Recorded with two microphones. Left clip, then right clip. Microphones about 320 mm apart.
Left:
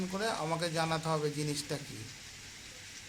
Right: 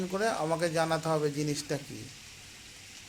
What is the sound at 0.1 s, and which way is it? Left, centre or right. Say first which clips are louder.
Speech: right 5 dB; centre.